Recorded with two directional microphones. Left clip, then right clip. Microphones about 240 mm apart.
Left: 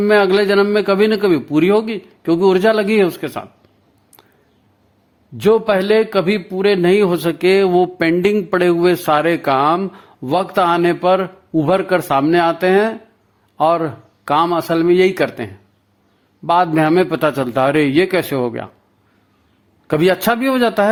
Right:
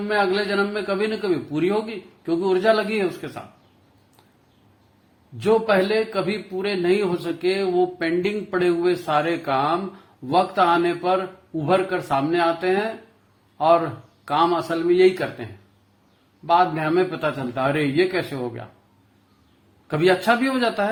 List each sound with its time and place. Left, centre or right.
0.1 s a man's voice: left
5.4 s a man's voice: left
16.5 s a man's voice: left
19.9 s a man's voice: left